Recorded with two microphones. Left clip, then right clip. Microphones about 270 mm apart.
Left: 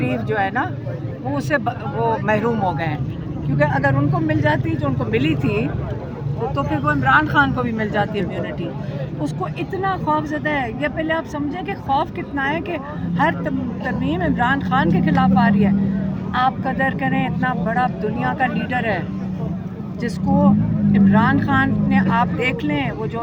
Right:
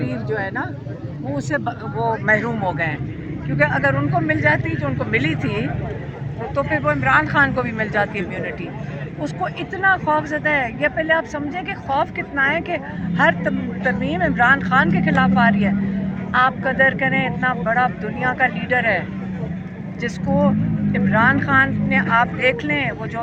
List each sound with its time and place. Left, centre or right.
0.3 s speech: centre
7.2 s speech: centre
9.2 s speech: left